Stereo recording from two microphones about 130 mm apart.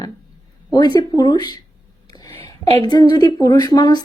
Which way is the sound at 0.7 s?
30° left (ahead or behind).